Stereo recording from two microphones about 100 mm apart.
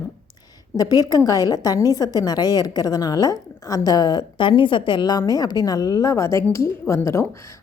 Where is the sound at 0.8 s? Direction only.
40° left (ahead or behind).